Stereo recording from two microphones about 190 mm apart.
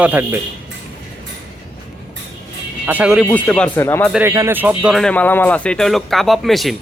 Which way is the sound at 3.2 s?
5° left (ahead or behind).